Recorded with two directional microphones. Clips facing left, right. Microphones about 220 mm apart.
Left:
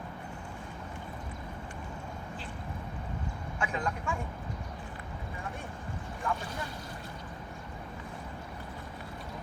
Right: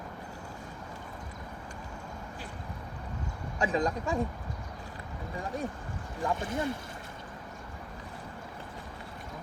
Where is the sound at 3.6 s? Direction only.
35° right (ahead or behind).